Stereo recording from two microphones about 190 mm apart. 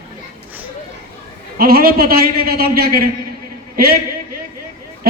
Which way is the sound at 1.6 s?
50° right (ahead or behind).